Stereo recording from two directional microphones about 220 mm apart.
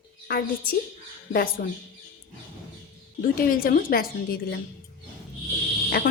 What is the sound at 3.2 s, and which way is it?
A woman's voice, 40° left (ahead or behind).